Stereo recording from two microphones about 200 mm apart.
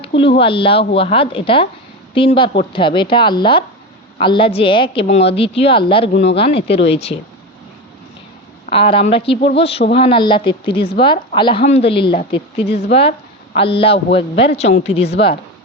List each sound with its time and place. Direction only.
0.3 s a woman's voice: 25° left (ahead or behind)
8.7 s a woman's voice: 25° left (ahead or behind)